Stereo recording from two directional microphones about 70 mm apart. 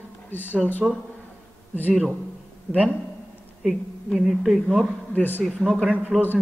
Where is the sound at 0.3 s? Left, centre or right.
Left.